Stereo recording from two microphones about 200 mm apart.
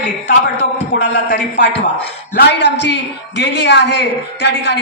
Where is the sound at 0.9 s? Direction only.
60° left (ahead or behind).